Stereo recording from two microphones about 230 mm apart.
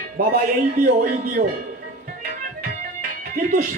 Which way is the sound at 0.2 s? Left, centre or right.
Right.